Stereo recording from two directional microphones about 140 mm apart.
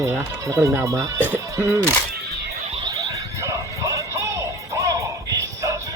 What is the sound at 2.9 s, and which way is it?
Music, 25° right (ahead or behind).